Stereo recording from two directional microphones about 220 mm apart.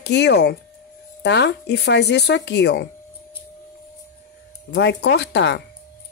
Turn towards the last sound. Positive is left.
turn(degrees=50)  # may be behind; listen again after turning